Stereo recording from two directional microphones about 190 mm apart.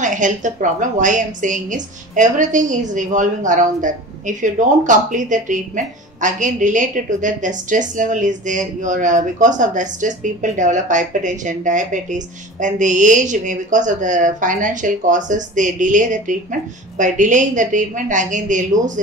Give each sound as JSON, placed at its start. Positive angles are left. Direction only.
{"t": 0.0, "sound": "a woman's voice", "side_deg": -40}